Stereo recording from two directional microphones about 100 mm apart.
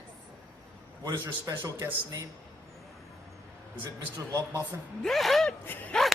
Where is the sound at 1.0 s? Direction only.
30° right (ahead or behind).